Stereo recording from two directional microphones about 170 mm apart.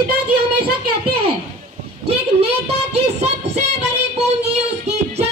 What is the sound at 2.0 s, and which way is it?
Speech, 35° right (ahead or behind).